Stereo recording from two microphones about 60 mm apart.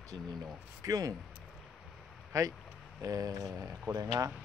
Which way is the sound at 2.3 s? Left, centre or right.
Right.